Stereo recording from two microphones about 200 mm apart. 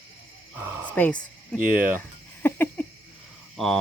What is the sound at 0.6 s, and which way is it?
Speech, 15° right (ahead or behind).